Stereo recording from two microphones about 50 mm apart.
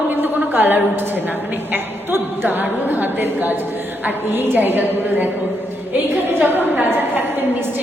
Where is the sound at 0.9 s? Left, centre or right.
Right.